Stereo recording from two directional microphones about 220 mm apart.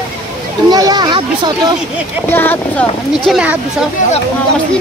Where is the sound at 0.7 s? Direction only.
15° right (ahead or behind).